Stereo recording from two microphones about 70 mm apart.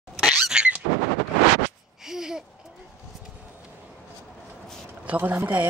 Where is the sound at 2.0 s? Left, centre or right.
Centre.